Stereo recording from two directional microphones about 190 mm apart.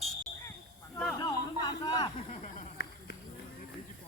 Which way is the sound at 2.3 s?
40° left (ahead or behind).